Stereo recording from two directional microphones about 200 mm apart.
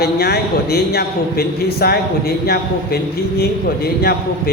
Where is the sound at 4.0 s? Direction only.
50° left (ahead or behind).